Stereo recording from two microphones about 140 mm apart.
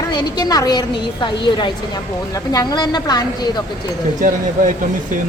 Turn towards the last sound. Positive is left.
turn(degrees=-65)  # may be behind; listen again after turning